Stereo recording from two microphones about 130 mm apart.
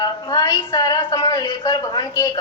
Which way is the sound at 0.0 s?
30° left (ahead or behind).